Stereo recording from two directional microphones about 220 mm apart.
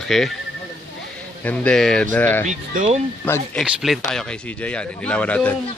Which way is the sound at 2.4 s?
35° right (ahead or behind).